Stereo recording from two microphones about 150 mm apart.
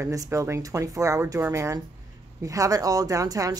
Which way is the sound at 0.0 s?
20° right (ahead or behind).